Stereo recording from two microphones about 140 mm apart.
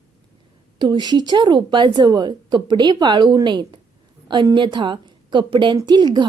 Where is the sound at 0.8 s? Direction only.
30° right (ahead or behind).